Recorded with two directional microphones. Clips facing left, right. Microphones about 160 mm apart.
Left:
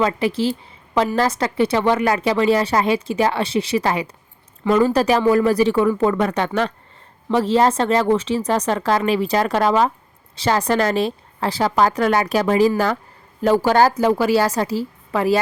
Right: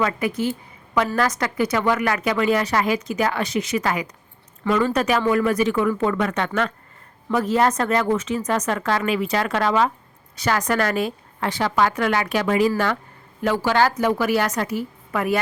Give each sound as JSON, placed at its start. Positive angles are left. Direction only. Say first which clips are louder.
{"t": 0.0, "sound": "speech", "louder": "left 3 dB", "side_deg": 30}
{"t": 4.6, "sound": "speech", "louder": "left 4 dB", "side_deg": 15}
{"t": 4.9, "sound": "speech", "louder": "left 4 dB", "side_deg": 35}
{"t": 13.9, "sound": "speech", "louder": "left 4 dB", "side_deg": 30}